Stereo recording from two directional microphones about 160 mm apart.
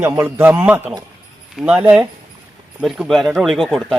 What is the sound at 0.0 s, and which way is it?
A man's voice, 15° right (ahead or behind).